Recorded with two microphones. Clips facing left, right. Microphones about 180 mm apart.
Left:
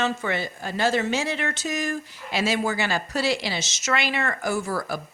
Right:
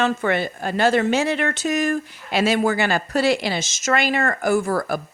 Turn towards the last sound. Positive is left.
turn(degrees=-55)  # may be behind; listen again after turning